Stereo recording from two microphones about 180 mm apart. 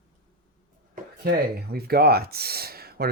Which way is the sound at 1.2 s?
60° right (ahead or behind).